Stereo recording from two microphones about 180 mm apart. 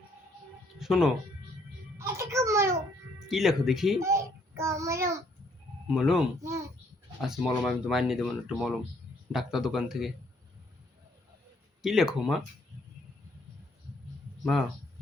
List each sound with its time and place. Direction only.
0.8 s speech: centre (ahead or behind)
2.0 s a sound: 15° right (ahead or behind)
3.2 s speech: centre (ahead or behind)
4.0 s child singing: 15° right (ahead or behind)
5.9 s speech: centre (ahead or behind)
11.8 s speech: centre (ahead or behind)